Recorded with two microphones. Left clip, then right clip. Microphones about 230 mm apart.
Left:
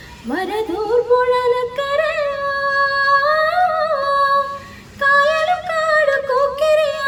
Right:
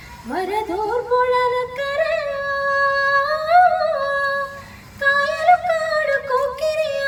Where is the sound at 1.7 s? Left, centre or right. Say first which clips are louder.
Left 2 dB; centre.